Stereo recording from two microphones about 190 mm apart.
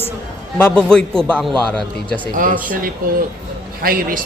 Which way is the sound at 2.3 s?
45° right (ahead or behind).